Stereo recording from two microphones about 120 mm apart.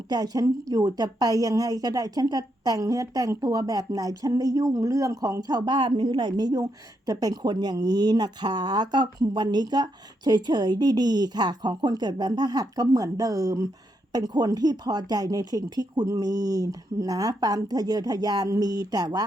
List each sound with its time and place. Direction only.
0.1 s a woman's voice: 30° right (ahead or behind)